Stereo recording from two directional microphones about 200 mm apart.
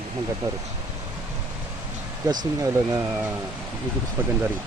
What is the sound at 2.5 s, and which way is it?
Speech, 15° right (ahead or behind).